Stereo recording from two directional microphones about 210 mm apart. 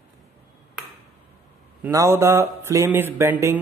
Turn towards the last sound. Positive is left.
turn(degrees=-10)  # may be behind; listen again after turning